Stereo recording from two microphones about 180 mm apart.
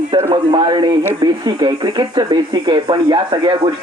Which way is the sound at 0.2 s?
15° right (ahead or behind).